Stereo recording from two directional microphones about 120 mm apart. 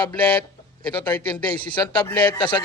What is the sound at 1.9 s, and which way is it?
Speech, 40° left (ahead or behind).